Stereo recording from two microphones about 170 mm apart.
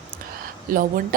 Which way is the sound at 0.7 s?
55° right (ahead or behind).